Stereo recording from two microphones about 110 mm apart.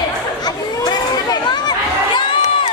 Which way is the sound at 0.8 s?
40° left (ahead or behind).